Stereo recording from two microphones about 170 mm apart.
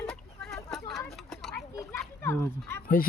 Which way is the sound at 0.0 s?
5° left (ahead or behind).